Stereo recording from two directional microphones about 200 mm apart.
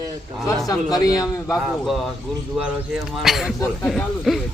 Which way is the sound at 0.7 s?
20° left (ahead or behind).